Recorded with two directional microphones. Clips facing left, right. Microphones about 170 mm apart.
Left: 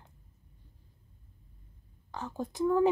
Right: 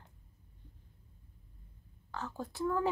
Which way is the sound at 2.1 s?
15° left (ahead or behind).